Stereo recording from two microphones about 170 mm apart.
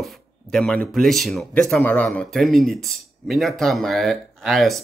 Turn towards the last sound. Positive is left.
turn(degrees=0)  # may be behind; listen again after turning